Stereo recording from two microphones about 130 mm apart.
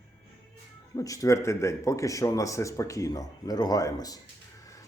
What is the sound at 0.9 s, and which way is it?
Speech, 25° left (ahead or behind).